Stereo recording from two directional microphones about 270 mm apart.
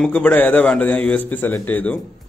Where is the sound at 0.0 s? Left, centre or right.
Centre.